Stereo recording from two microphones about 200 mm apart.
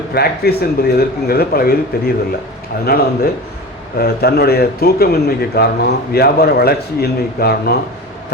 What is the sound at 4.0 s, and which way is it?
Speech, 55° left (ahead or behind).